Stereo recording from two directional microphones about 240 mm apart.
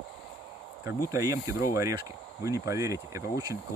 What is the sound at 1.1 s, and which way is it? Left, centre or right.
Speech, centre.